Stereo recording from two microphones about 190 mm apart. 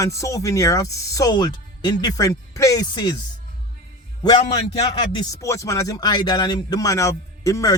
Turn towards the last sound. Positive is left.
turn(degrees=15)  # may be behind; listen again after turning